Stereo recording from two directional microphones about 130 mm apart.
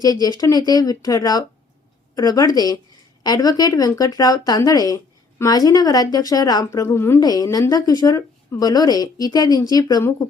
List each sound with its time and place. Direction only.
0.0 s speech: 30° left (ahead or behind)